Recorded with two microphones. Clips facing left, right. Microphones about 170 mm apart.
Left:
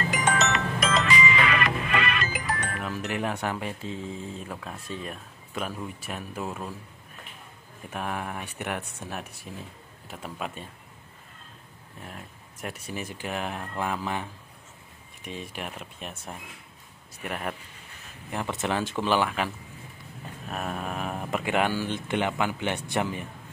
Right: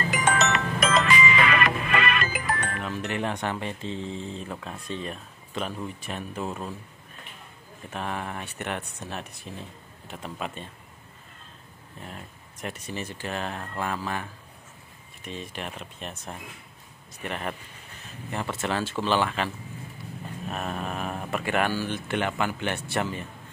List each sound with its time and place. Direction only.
0.7 s music: 55° right (ahead or behind)
2.8 s speech: 5° left (ahead or behind)
7.9 s speech: 10° left (ahead or behind)
12.1 s speech: 5° left (ahead or behind)
15.2 s speech: 10° left (ahead or behind)